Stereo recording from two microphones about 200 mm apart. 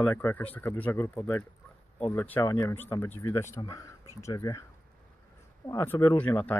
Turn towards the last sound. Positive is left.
turn(degrees=10)  # may be behind; listen again after turning